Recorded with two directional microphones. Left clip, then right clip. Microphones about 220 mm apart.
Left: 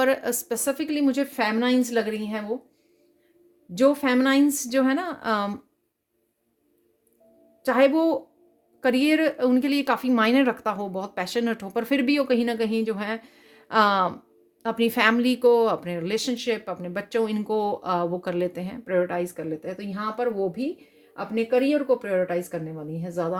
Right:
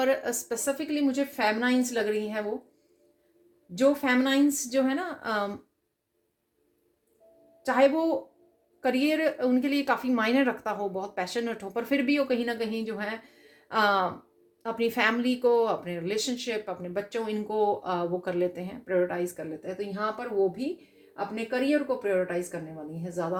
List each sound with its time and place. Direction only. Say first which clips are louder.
0.0 s a woman's voice: left 4 dB; 55° left (ahead or behind)
3.8 s speech: left 3 dB; 55° left (ahead or behind)
7.6 s a woman's voice: left 3 dB; 55° left (ahead or behind)